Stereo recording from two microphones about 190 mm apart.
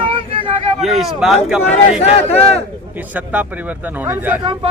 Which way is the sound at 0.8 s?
Centre (ahead or behind).